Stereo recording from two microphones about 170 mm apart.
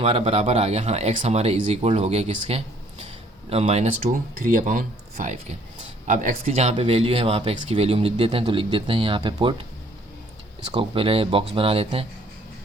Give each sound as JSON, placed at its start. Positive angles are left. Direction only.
{"t": 0.0, "sound": "speech", "side_deg": -35}
{"t": 4.4, "sound": "speech", "side_deg": -55}